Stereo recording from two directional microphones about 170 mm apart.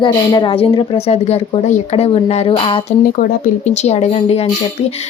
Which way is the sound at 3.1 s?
55° left (ahead or behind).